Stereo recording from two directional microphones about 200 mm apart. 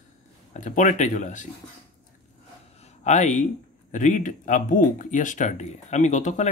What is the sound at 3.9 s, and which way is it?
Speech, 40° left (ahead or behind).